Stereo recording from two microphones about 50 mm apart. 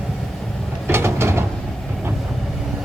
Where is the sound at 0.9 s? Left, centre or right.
Right.